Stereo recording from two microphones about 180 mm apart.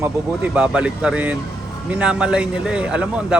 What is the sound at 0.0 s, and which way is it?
A man's voice, 5° right (ahead or behind).